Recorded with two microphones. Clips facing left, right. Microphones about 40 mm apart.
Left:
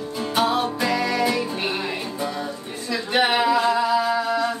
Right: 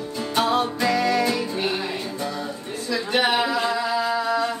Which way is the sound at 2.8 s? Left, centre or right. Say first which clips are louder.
Left 1 dB; centre.